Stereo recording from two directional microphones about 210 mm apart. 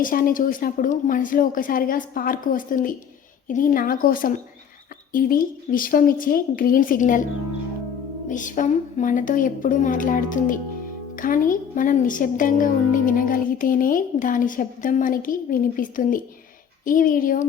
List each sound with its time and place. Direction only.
0.0 s a woman's voice: 40° left (ahead or behind)
8.3 s a woman's voice: 35° left (ahead or behind)